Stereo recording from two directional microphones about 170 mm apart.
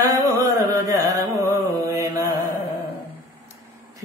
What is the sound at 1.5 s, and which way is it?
Mantra, 20° right (ahead or behind).